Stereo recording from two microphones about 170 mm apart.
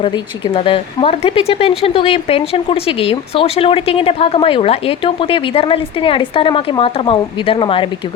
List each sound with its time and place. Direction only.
0.0 s speech: 30° left (ahead or behind)